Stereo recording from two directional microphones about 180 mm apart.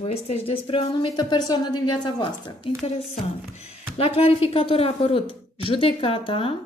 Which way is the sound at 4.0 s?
35° left (ahead or behind).